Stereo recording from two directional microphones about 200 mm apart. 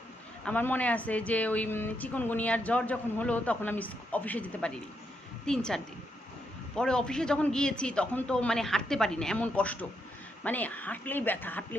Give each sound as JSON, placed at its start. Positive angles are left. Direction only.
{"t": 0.4, "sound": "a man's voice", "side_deg": 10}